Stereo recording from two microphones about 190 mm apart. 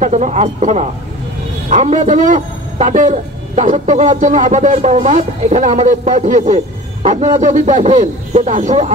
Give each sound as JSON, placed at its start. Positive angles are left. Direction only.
{"t": 0.0, "sound": "speech", "side_deg": -40}